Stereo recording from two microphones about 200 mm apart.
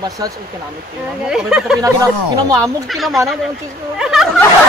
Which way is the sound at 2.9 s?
Centre (ahead or behind).